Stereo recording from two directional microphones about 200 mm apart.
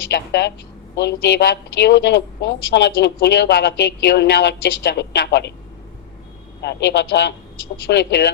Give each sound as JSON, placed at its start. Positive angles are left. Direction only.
{"t": 0.1, "sound": "a woman's voice", "side_deg": 55}
{"t": 6.6, "sound": "a woman's voice", "side_deg": 55}